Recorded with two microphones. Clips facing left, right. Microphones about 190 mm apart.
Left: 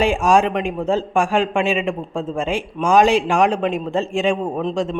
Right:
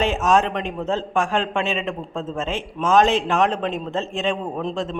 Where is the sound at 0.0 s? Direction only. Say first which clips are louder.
Left 3 dB; 10° left (ahead or behind).